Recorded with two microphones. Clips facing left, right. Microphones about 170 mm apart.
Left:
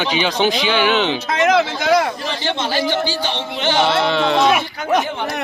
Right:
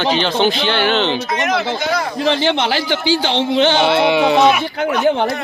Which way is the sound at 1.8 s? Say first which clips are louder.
Left 4 dB; 85° left.